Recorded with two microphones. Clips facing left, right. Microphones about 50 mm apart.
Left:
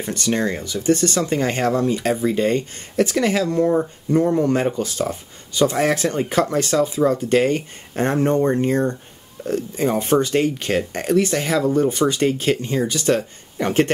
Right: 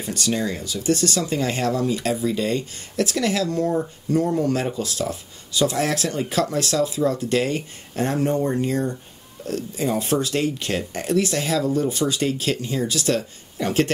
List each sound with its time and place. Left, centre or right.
0.0 s speech: left